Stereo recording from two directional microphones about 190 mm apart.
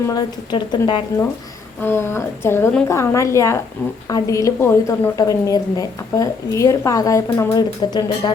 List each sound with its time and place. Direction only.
0.1 s a woman's voice: 20° left (ahead or behind)
1.8 s a woman's voice: 10° left (ahead or behind)